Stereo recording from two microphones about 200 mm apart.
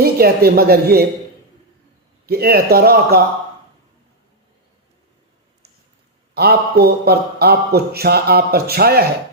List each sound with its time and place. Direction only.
0.0 s a man's voice: 50° right (ahead or behind)
2.2 s a man's voice: 50° right (ahead or behind)
6.3 s a man's voice: 50° right (ahead or behind)